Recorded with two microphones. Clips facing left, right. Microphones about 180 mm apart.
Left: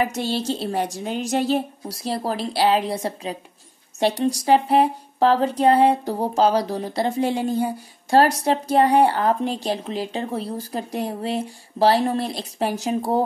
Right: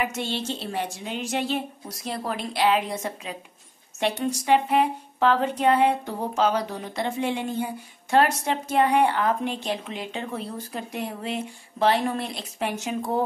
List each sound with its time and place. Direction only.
0.0 s speech: 35° left (ahead or behind)